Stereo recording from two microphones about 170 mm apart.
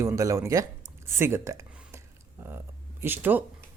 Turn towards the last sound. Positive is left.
turn(degrees=-10)  # may be behind; listen again after turning